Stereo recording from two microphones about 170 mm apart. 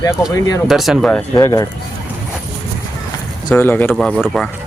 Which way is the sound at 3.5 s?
15° left (ahead or behind).